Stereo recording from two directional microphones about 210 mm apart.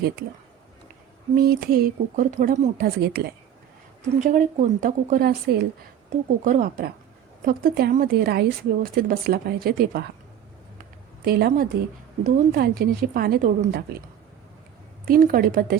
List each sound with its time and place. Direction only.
1.4 s a woman's voice: 45° right (ahead or behind)
4.0 s a woman's voice: 35° right (ahead or behind)
11.3 s a woman's voice: 45° right (ahead or behind)
15.0 s a woman's voice: 45° right (ahead or behind)